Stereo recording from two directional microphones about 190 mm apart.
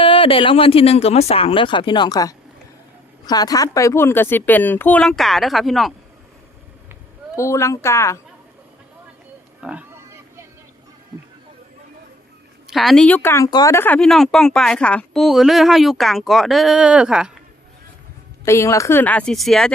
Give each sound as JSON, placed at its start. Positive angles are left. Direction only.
{"t": 0.0, "sound": "speech", "side_deg": 30}
{"t": 7.3, "sound": "speech", "side_deg": 15}
{"t": 9.6, "sound": "a sound", "side_deg": -5}
{"t": 12.6, "sound": "speech", "side_deg": 0}
{"t": 18.4, "sound": "speech", "side_deg": 15}